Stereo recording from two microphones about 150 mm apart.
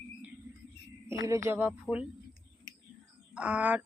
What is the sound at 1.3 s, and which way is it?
Speech, 20° right (ahead or behind).